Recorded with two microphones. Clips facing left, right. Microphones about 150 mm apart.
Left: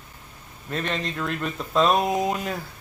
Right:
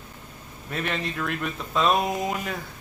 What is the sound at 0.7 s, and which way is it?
Speech, 5° right (ahead or behind).